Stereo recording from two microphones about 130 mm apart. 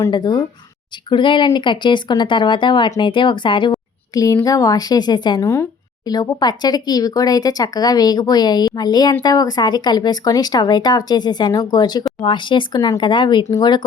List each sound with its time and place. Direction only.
0.1 s speech: 35° left (ahead or behind)
4.1 s a woman's voice: 25° left (ahead or behind)